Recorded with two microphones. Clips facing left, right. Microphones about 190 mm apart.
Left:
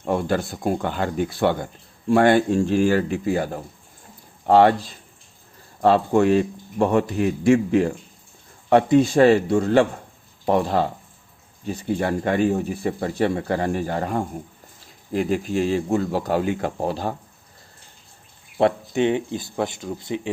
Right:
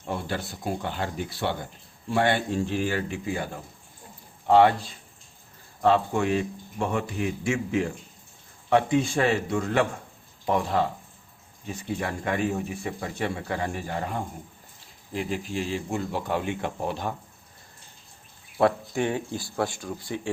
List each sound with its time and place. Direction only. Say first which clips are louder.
0.0 s speech: left 9 dB; 50° left (ahead or behind)
5.8 s speech: left 6 dB; 40° left (ahead or behind)
18.5 s speech: left 3 dB; 20° left (ahead or behind)